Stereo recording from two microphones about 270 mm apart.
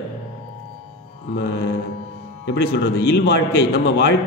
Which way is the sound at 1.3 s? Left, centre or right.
Left.